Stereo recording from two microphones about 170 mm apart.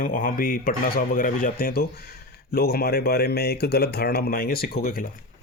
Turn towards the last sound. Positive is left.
turn(degrees=60)  # may be behind; listen again after turning